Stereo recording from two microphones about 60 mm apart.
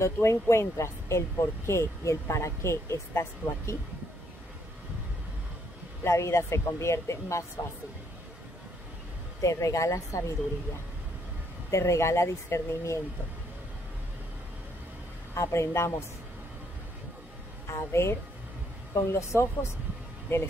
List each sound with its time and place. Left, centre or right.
0.0 s speech: left
6.0 s speech: left
9.4 s speech: left
11.7 s speech: left
15.3 s speech: left
17.6 s speech: left